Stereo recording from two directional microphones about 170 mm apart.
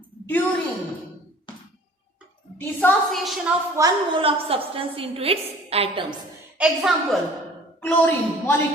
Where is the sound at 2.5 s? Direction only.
10° left (ahead or behind).